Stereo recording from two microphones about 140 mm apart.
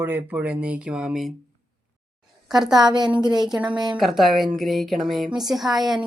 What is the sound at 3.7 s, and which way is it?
Speech, 30° right (ahead or behind).